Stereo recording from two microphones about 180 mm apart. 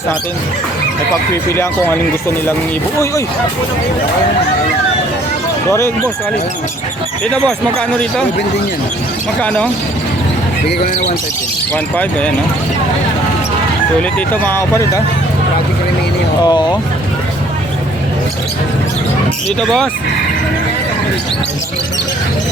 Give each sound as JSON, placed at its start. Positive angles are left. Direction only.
{"t": 1.3, "sound": "speech", "side_deg": 15}
{"t": 9.4, "sound": "speech", "side_deg": 10}
{"t": 11.7, "sound": "speech", "side_deg": 10}
{"t": 14.4, "sound": "speech", "side_deg": 15}
{"t": 16.4, "sound": "speech", "side_deg": 25}